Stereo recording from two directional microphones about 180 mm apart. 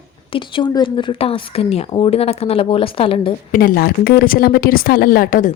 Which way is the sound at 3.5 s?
50° left (ahead or behind).